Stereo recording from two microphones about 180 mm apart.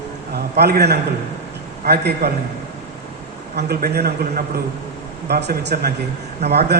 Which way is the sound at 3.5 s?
60° right (ahead or behind).